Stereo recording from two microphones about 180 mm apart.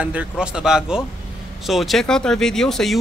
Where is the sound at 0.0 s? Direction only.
5° right (ahead or behind).